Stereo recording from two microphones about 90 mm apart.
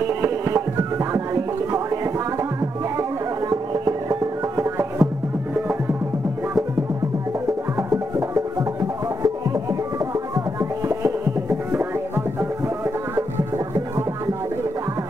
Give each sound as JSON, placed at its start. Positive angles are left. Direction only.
{"t": 0.0, "sound": "music", "side_deg": -30}
{"t": 7.7, "sound": "music", "side_deg": -40}